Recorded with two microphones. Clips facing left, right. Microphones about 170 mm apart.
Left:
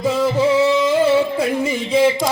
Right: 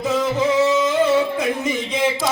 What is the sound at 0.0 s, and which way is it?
Singing, 10° left (ahead or behind).